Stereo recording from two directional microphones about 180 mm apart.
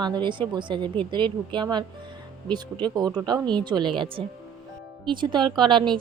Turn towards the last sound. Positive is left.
turn(degrees=-25)  # may be behind; listen again after turning